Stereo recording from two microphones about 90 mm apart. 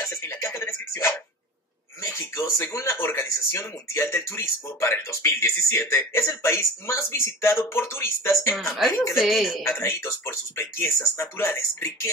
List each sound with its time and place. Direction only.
0.0 s speech: 30° left (ahead or behind)
8.7 s a woman's voice: centre (ahead or behind)
9.7 s speech: 30° left (ahead or behind)